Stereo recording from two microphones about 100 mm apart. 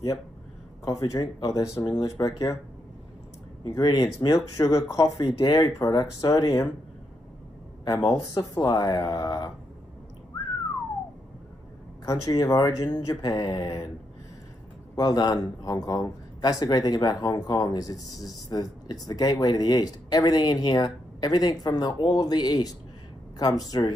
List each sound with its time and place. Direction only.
0.8 s speech: 35° left (ahead or behind)
3.6 s speech: 40° left (ahead or behind)
5.2 s speech: 45° left (ahead or behind); by 6.7 s 30° left (ahead or behind)
7.8 s speech: 45° left (ahead or behind)
12.1 s speech: 35° left (ahead or behind)
15.0 s speech: 40° left (ahead or behind)